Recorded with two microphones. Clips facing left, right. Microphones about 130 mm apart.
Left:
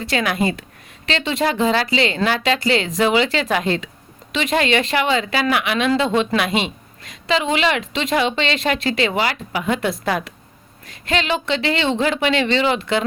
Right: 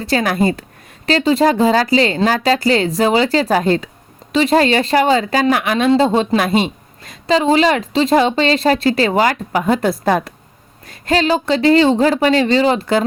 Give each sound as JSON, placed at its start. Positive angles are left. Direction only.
{"t": 0.0, "sound": "a woman's voice", "side_deg": -40}